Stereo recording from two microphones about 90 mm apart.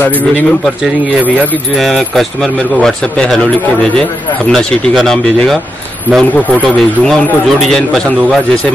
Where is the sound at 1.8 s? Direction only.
Centre (ahead or behind).